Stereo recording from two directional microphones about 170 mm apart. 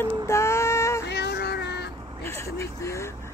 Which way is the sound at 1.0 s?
80° left.